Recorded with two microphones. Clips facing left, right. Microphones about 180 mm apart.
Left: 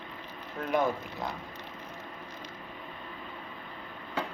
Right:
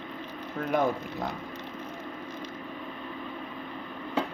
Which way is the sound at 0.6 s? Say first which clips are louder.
Right 2 dB; 45° right (ahead or behind).